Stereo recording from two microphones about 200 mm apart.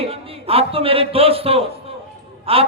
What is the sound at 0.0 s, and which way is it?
A man's voice, 30° right (ahead or behind).